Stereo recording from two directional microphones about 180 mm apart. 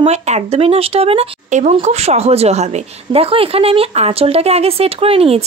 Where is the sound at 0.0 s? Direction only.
40° right (ahead or behind).